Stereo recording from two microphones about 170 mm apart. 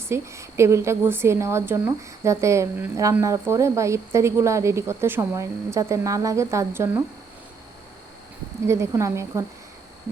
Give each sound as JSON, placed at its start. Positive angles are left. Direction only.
{"t": 0.1, "sound": "a woman's voice", "side_deg": -15}
{"t": 8.6, "sound": "a woman's voice", "side_deg": -15}